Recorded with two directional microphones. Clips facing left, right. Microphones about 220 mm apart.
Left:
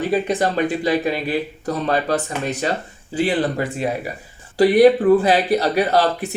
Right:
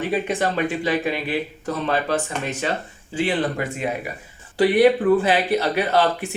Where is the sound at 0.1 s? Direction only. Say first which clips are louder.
Left 3 dB; 40° left (ahead or behind).